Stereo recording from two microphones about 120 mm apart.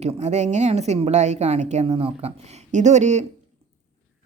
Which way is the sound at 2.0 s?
60° right (ahead or behind).